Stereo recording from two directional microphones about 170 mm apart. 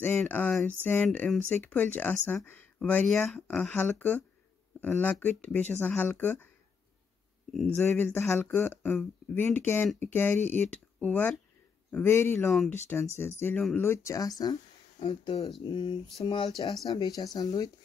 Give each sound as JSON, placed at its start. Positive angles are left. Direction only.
{"t": 0.0, "sound": "speech", "side_deg": 10}
{"t": 7.5, "sound": "speech", "side_deg": 5}
{"t": 12.4, "sound": "speech", "side_deg": 0}
{"t": 12.8, "sound": "speech", "side_deg": 15}